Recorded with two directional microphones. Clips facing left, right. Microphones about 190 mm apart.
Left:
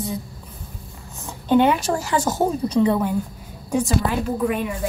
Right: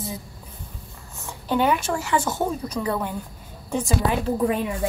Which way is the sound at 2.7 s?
25° left (ahead or behind).